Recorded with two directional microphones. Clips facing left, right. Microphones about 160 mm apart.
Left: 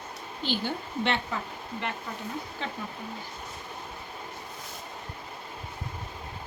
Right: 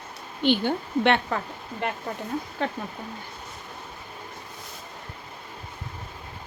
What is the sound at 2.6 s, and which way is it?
Speech, 50° right (ahead or behind).